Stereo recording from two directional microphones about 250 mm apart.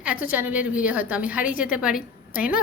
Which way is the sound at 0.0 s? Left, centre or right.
Centre.